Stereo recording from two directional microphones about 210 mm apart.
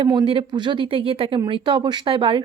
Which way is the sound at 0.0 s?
20° right (ahead or behind).